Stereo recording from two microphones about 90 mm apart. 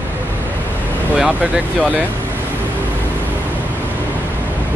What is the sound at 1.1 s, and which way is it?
Speech, 15° right (ahead or behind).